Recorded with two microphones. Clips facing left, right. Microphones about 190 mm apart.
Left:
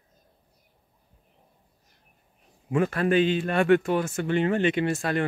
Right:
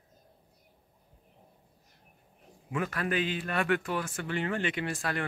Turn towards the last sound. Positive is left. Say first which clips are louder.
# left 8 dB
turn(degrees=25)  # may be behind; listen again after turning